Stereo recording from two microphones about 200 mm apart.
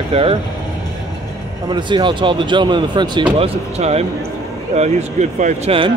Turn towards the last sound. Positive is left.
turn(degrees=-25)  # may be behind; listen again after turning